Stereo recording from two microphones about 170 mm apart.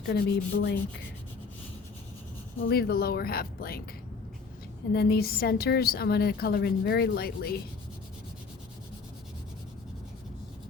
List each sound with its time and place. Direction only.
0.0 s rub: 80° left
2.6 s a woman's voice: 65° left (ahead or behind)
4.9 s a woman's voice: 65° left (ahead or behind)